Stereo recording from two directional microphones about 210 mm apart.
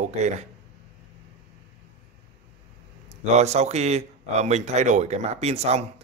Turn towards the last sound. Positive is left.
turn(degrees=-30)  # may be behind; listen again after turning